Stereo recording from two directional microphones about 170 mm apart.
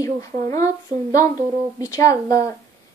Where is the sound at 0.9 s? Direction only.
50° right (ahead or behind).